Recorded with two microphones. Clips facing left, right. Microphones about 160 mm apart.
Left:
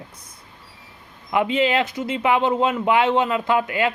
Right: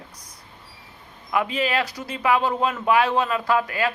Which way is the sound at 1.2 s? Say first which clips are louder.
Left 4 dB; 25° left (ahead or behind).